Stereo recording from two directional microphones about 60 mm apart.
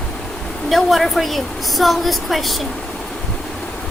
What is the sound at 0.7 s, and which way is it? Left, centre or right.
A woman's voice, centre.